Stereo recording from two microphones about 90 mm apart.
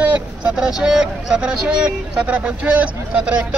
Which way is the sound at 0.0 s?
10° right (ahead or behind).